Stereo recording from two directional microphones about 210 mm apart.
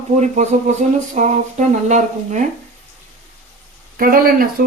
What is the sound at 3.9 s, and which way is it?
Speech, 45° right (ahead or behind).